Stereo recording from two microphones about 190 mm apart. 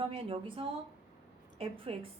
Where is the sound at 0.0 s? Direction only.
25° right (ahead or behind).